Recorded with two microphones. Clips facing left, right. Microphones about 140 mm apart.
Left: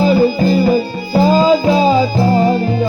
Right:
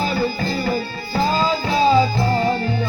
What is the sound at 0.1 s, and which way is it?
Music, 15° left (ahead or behind).